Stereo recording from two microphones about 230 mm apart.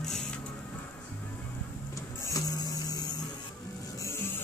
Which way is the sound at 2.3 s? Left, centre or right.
Centre.